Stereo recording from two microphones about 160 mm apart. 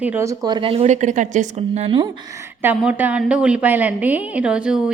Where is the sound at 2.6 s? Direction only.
10° right (ahead or behind).